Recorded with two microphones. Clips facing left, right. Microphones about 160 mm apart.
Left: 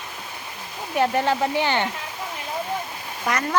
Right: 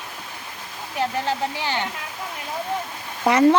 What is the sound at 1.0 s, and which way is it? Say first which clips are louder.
Speech: left 3 dB; 60° left (ahead or behind).